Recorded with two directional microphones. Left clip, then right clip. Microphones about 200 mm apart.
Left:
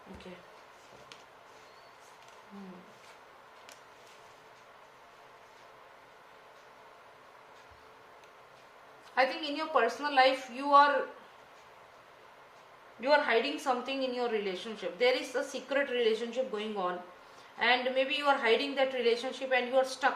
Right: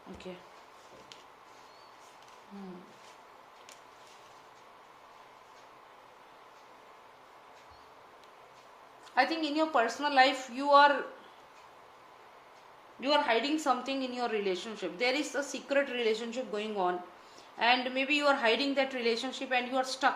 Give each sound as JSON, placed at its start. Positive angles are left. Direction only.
{"t": 9.1, "sound": "a woman's voice", "side_deg": -45}
{"t": 13.0, "sound": "a woman's voice", "side_deg": -45}